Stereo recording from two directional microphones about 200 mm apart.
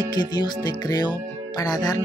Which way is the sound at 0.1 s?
20° left (ahead or behind).